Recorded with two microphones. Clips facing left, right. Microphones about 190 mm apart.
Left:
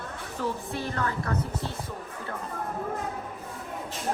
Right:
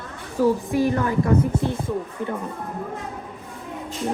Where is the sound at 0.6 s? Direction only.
15° right (ahead or behind).